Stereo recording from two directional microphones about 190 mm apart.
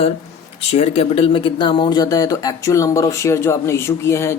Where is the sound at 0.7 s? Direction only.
30° left (ahead or behind).